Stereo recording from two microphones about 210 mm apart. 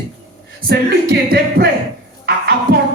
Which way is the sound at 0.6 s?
50° right (ahead or behind).